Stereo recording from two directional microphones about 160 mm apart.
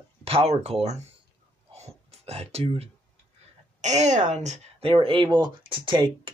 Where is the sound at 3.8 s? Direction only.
45° right (ahead or behind).